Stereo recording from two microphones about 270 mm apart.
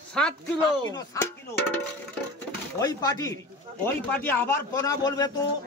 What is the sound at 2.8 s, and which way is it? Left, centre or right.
Speech, centre.